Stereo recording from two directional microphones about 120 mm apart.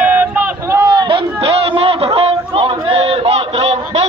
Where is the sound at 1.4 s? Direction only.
55° right (ahead or behind).